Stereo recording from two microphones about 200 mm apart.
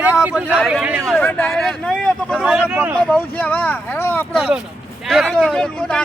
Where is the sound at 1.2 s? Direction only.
5° left (ahead or behind).